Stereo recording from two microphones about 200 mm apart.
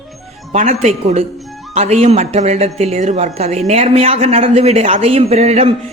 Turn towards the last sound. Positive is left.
turn(degrees=-30)  # may be behind; listen again after turning